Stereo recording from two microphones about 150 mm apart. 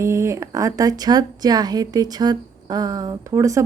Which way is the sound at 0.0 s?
20° right (ahead or behind).